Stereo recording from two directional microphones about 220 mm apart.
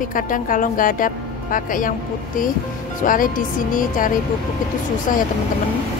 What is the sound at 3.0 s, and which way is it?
A woman's voice, 40° left (ahead or behind).